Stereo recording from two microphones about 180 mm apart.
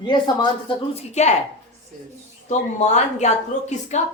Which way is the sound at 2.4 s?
40° left (ahead or behind).